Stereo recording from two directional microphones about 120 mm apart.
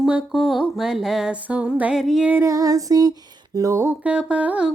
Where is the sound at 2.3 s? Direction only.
25° right (ahead or behind).